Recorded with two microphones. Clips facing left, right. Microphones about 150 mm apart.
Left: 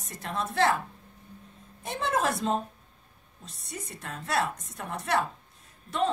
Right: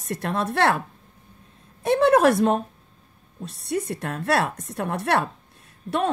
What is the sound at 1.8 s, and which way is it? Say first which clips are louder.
A woman's voice: right 12 dB; 70° right (ahead or behind).